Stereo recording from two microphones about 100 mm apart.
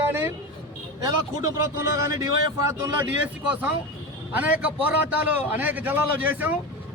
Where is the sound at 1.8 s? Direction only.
35° right (ahead or behind).